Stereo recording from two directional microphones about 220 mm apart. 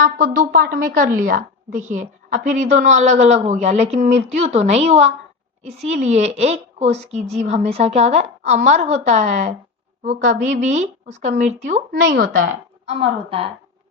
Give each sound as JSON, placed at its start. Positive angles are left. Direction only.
{"t": 0.0, "sound": "a woman's voice", "side_deg": -40}